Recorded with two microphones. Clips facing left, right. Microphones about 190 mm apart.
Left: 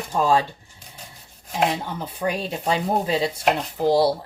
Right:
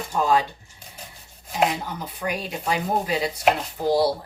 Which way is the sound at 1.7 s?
30° left (ahead or behind).